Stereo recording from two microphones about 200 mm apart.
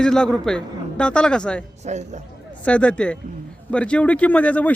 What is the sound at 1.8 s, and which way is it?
Speech, 35° right (ahead or behind).